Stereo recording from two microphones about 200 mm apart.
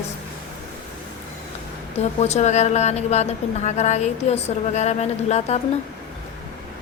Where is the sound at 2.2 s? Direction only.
35° left (ahead or behind).